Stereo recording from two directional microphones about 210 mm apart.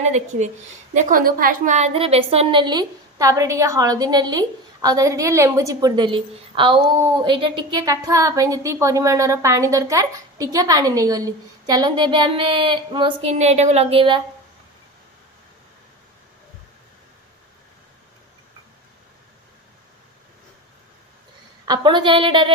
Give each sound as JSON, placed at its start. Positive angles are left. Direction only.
{"t": 0.0, "sound": "a woman's voice", "side_deg": -35}
{"t": 21.7, "sound": "a woman's voice", "side_deg": -20}